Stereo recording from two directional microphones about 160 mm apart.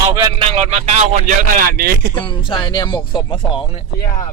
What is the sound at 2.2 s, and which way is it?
Speech, 30° left (ahead or behind).